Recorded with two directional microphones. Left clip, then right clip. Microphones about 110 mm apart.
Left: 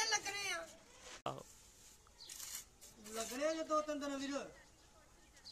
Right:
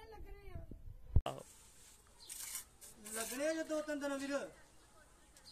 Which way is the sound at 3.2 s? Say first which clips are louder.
Even; 15° left (ahead or behind).